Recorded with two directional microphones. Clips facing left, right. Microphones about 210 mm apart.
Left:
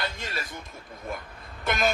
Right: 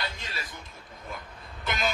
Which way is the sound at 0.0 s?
50° left (ahead or behind).